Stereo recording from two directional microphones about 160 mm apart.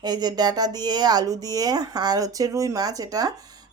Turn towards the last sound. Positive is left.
turn(degrees=-20)  # may be behind; listen again after turning